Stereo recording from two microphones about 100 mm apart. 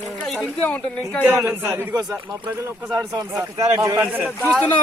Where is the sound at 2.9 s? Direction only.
35° right (ahead or behind).